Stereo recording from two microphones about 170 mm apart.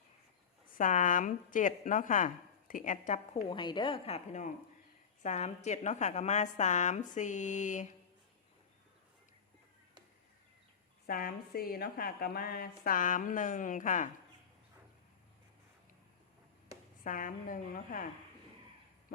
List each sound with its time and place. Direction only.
0.8 s a woman's voice: 50° left (ahead or behind)
3.5 s a woman's voice: 30° left (ahead or behind); by 7.9 s 45° left (ahead or behind)
11.0 s a woman's voice: 60° left (ahead or behind)
17.0 s a woman's voice: 50° left (ahead or behind)